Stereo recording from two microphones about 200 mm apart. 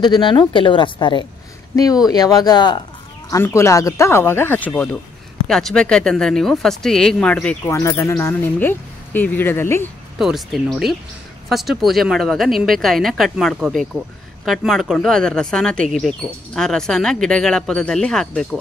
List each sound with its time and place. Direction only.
0.0 s speech: 20° left (ahead or behind); by 7.7 s 5° left (ahead or behind)
7.7 s speech: 15° left (ahead or behind)
10.1 s speech: centre (ahead or behind)